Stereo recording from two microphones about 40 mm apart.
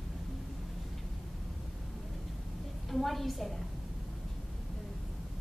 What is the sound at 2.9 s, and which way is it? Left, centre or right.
Speech, centre.